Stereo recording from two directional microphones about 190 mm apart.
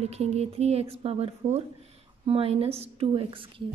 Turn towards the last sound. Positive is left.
turn(degrees=-25)  # may be behind; listen again after turning